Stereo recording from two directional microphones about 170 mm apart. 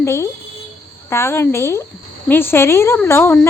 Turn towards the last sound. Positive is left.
turn(degrees=15)  # may be behind; listen again after turning